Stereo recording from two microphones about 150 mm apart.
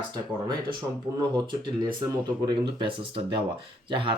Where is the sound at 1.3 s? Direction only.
30° right (ahead or behind).